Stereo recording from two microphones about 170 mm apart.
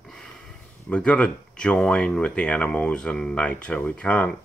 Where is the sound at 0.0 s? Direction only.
5° left (ahead or behind).